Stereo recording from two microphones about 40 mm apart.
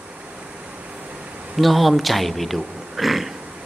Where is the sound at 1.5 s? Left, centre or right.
Centre.